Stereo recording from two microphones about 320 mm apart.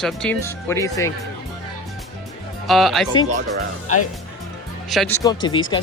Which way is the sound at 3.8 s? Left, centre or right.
Left.